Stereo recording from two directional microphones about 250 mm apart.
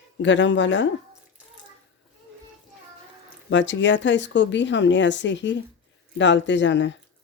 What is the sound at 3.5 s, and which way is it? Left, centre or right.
Speech, left.